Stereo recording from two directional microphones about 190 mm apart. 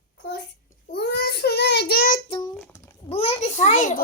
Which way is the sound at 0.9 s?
60° left (ahead or behind).